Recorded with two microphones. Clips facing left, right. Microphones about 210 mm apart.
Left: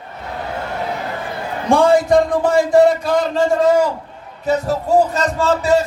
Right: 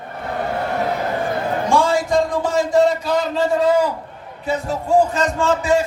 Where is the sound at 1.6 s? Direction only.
55° left (ahead or behind).